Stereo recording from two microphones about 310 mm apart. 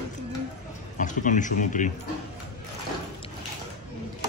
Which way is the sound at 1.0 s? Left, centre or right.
Left.